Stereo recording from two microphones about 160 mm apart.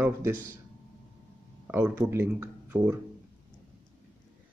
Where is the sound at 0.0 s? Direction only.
15° right (ahead or behind).